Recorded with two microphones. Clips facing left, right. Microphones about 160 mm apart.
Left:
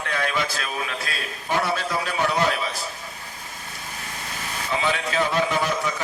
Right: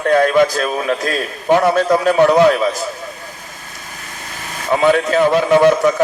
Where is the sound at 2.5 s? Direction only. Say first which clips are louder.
Right 11 dB; 45° right (ahead or behind).